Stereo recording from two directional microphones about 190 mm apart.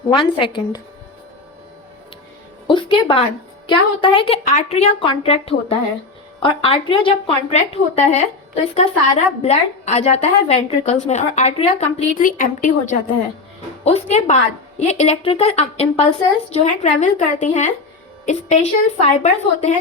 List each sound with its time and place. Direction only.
0.1 s a woman's voice: 25° left (ahead or behind)
2.6 s a sound: 25° left (ahead or behind)
3.7 s a woman's voice: 30° left (ahead or behind)